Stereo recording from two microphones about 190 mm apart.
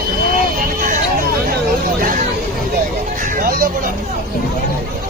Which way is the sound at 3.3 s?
50° right (ahead or behind).